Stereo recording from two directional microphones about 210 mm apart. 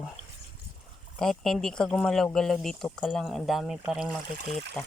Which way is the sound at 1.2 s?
Centre (ahead or behind).